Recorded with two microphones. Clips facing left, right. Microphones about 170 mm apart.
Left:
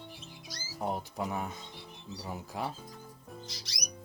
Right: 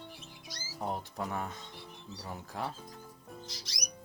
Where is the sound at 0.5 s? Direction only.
5° left (ahead or behind).